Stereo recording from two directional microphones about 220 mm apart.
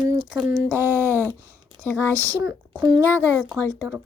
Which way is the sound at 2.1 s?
15° right (ahead or behind).